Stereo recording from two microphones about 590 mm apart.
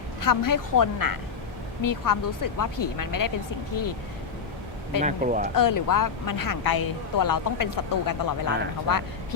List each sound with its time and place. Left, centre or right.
0.2 s speech: left
5.0 s speech: centre
5.5 s speech: left